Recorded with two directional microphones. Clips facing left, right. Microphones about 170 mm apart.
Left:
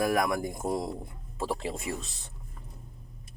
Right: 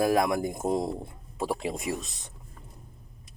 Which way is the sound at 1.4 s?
15° right (ahead or behind).